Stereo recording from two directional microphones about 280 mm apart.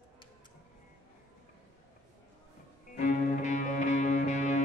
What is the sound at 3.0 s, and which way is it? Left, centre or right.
Music, left.